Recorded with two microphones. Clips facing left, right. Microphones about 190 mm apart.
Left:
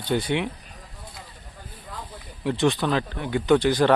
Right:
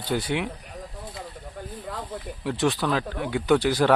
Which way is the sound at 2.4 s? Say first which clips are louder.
Left 3 dB; 5° right (ahead or behind).